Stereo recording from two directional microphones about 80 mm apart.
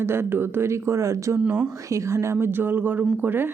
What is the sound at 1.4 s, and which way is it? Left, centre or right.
Speech, centre.